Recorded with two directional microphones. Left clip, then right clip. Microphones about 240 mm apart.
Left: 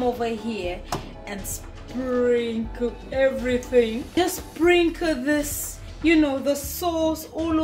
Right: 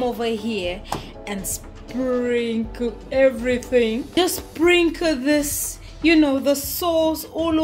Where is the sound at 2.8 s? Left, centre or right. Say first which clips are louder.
Right 4 dB; right.